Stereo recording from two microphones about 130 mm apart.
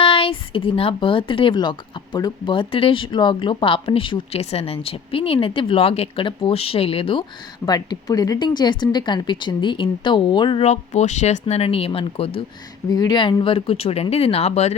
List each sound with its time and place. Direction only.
0.0 s speech: 45° left (ahead or behind)
10.6 s speech: 60° left (ahead or behind)
12.9 s speech: 30° left (ahead or behind); by 14.8 s 55° left (ahead or behind)